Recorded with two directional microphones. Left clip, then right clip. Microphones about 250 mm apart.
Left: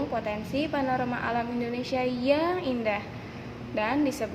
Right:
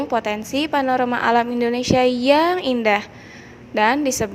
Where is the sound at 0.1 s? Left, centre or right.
Right.